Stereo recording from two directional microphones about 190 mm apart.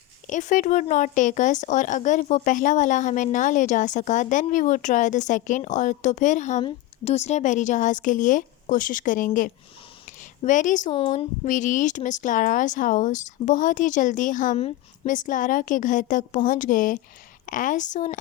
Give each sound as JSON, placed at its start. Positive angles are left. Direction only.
{"t": 0.3, "sound": "speech", "side_deg": 40}
{"t": 10.1, "sound": "a sound", "side_deg": 40}
{"t": 10.9, "sound": "speech", "side_deg": 30}